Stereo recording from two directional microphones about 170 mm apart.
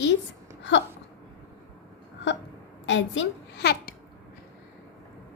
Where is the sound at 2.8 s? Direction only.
90° left; by 3.9 s 75° left (ahead or behind).